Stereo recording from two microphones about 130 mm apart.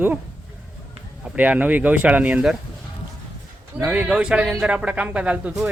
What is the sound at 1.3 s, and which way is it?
A man's voice, 10° right (ahead or behind).